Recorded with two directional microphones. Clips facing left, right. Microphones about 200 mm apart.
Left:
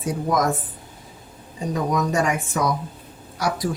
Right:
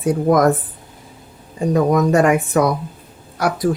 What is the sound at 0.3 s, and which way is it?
Speech, 55° right (ahead or behind).